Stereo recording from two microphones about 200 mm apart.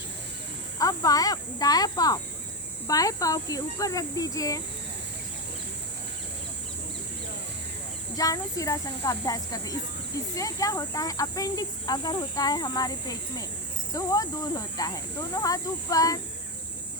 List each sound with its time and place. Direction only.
0.8 s speech: 15° left (ahead or behind)
8.1 s speech: 15° left (ahead or behind)